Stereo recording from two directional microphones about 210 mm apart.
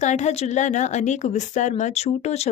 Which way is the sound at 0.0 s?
35° left (ahead or behind).